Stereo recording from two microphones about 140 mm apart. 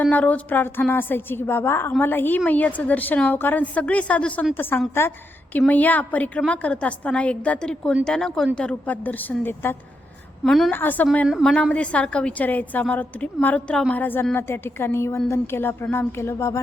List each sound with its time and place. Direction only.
0.0 s a woman's voice: 10° left (ahead or behind)
10.4 s speech: centre (ahead or behind)
10.7 s a woman's voice: 15° left (ahead or behind)